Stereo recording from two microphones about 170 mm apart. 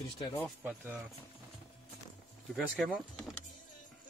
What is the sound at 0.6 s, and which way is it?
Speech, 10° right (ahead or behind).